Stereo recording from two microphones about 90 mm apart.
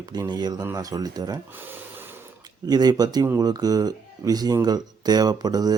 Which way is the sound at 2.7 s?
50° right (ahead or behind).